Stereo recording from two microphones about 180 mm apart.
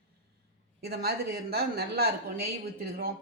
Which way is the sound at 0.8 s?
60° right (ahead or behind).